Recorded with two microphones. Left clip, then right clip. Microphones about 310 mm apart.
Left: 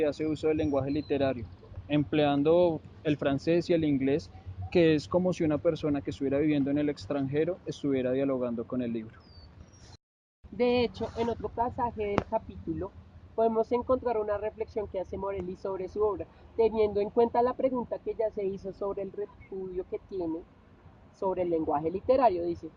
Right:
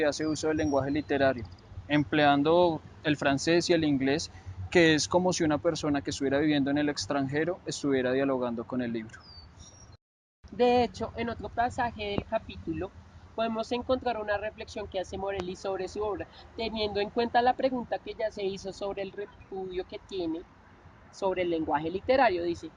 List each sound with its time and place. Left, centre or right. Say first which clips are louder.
0.0 s speech: even; right
10.6 s speech: right 2 dB; right
11.2 s speech: even; right
13.3 s speech: left 4 dB; right
21.2 s speech: even; right